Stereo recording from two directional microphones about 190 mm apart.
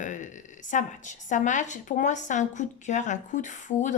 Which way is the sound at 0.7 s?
40° left (ahead or behind).